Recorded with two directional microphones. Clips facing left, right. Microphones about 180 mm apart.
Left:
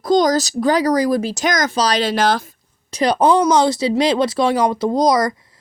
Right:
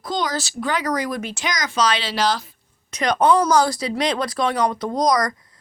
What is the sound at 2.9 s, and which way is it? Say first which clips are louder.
Speech: left 3 dB; 30° left (ahead or behind).